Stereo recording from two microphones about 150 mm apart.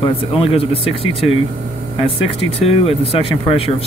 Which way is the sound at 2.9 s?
40° left (ahead or behind).